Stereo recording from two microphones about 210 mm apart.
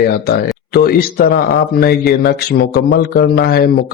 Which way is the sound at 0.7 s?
45° left (ahead or behind).